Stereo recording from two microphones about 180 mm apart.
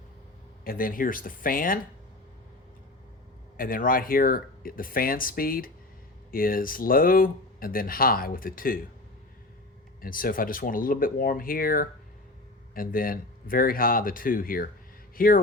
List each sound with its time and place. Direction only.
0.6 s speech: 50° left (ahead or behind)
3.6 s speech: 50° left (ahead or behind)
10.0 s speech: 50° left (ahead or behind)